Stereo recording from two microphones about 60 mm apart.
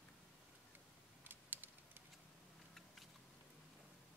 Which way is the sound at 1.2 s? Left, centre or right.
Right.